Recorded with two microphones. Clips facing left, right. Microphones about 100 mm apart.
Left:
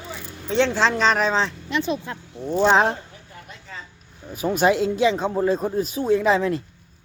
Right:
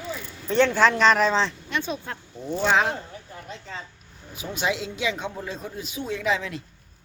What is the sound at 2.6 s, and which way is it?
Speech, 35° left (ahead or behind).